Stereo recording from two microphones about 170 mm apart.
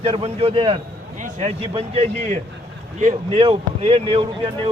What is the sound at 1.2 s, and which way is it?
Speech, 40° right (ahead or behind).